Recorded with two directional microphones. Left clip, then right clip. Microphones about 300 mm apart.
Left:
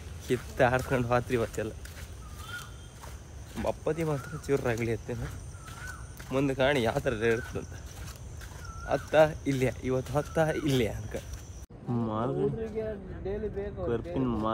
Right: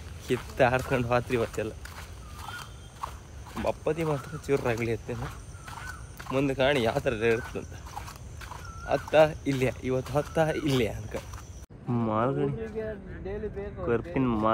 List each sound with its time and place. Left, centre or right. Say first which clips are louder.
0.3 s speech: right 1 dB; centre
13.3 s speech: left 1 dB; centre
13.8 s speech: right 5 dB; centre